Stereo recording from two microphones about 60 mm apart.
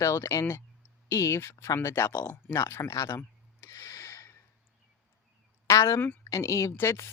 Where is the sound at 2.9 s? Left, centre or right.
Left.